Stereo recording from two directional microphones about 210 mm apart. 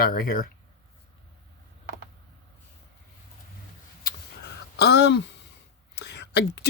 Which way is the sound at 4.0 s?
45° left (ahead or behind).